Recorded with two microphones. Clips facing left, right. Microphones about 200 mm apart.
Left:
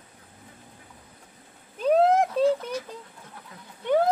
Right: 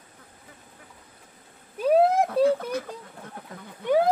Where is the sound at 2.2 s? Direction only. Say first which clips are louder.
Right 1 dB; 55° right (ahead or behind).